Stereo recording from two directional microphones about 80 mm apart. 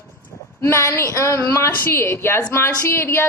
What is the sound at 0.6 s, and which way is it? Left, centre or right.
A woman's voice, left.